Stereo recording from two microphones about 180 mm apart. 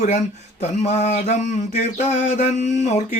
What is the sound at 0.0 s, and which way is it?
Speech, 40° left (ahead or behind).